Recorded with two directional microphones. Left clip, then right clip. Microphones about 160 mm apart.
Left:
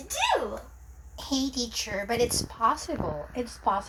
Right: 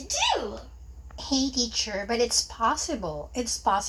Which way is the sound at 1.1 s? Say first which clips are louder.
Right 3 dB; 10° right (ahead or behind).